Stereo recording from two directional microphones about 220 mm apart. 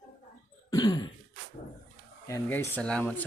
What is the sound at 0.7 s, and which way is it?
Cough, 20° left (ahead or behind).